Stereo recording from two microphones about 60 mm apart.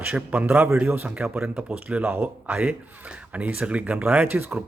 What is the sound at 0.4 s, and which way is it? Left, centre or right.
A man's voice, right.